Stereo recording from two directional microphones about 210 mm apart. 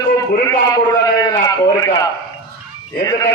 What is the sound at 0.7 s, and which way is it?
A man's voice, 20° left (ahead or behind).